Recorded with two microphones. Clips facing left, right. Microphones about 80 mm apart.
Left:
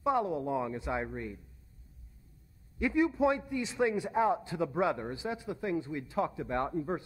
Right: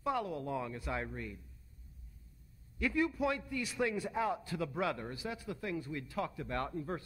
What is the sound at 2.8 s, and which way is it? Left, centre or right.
Speech, left.